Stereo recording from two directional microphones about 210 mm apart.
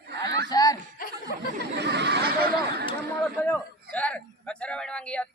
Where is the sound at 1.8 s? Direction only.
55° right (ahead or behind).